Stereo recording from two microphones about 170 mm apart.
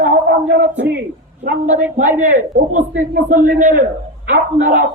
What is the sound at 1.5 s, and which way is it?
A man's voice, 45° right (ahead or behind).